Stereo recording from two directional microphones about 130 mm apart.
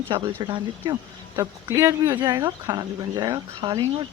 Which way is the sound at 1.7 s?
25° right (ahead or behind).